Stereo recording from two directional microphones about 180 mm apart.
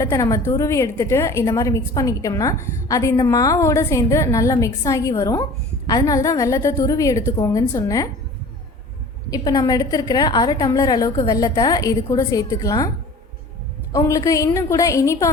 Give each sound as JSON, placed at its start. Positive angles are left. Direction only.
{"t": 0.0, "sound": "a woman's voice", "side_deg": 20}
{"t": 9.3, "sound": "a woman's voice", "side_deg": 20}
{"t": 13.9, "sound": "a woman's voice", "side_deg": 20}